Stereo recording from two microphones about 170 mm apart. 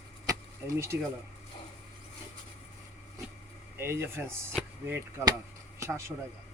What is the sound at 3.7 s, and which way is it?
Speech, 15° right (ahead or behind).